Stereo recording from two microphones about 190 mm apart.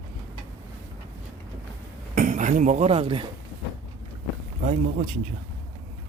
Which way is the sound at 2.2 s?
40° right (ahead or behind).